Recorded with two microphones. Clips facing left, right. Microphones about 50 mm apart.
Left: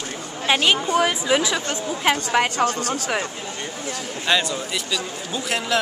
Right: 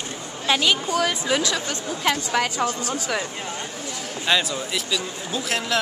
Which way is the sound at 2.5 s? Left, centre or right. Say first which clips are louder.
Left 3 dB; left.